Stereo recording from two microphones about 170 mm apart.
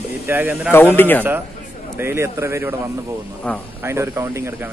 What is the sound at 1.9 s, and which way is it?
Speech, 15° right (ahead or behind).